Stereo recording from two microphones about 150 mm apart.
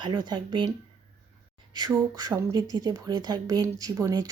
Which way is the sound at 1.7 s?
25° right (ahead or behind).